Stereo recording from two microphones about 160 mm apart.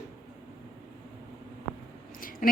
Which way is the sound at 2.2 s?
60° left (ahead or behind).